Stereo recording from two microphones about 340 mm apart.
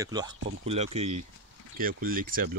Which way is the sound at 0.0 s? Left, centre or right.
Centre.